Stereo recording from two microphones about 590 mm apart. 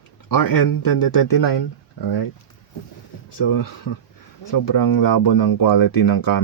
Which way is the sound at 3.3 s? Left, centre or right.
Left.